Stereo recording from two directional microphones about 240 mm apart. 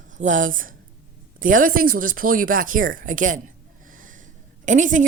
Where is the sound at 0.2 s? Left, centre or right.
Right.